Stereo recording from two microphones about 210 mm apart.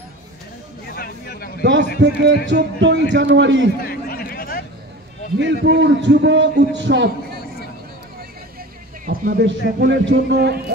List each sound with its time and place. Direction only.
0.9 s a sound: 45° left (ahead or behind)
1.6 s a man's voice: 55° right (ahead or behind)
3.8 s a sound: 45° left (ahead or behind)
5.4 s a man's voice: 55° right (ahead or behind)
9.0 s speech: 40° right (ahead or behind)
9.8 s a man's voice: 55° right (ahead or behind)